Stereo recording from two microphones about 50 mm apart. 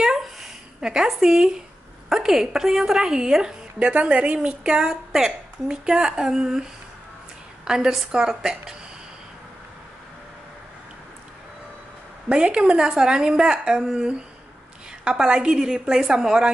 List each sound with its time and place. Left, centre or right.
0.0 s a sound: centre
2.0 s a woman's voice: centre
3.8 s a woman's voice: right; by 8.7 s centre
12.3 s a woman's voice: centre
15.0 s a woman's voice: centre